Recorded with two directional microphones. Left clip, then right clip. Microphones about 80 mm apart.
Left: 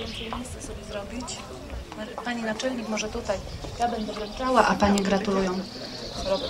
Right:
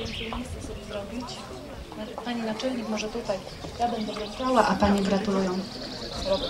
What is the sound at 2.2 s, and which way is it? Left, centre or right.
A woman's voice, left.